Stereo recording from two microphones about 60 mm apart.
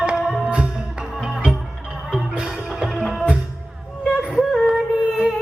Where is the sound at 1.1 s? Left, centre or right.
Centre.